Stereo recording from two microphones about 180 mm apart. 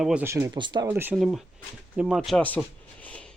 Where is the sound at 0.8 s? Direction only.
10° right (ahead or behind).